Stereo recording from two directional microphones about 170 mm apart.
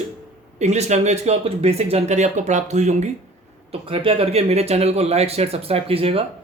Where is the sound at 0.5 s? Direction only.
40° right (ahead or behind).